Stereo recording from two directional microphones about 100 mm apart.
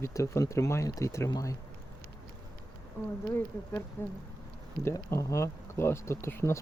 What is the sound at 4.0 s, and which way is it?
Speech, 25° left (ahead or behind).